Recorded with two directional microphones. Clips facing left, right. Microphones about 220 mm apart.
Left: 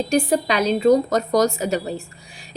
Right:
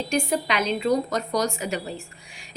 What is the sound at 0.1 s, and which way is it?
A woman's voice, 35° left (ahead or behind).